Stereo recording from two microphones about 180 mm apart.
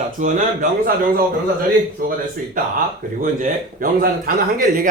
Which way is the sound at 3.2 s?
50° right (ahead or behind).